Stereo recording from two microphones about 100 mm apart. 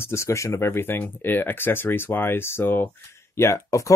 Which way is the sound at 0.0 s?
30° left (ahead or behind).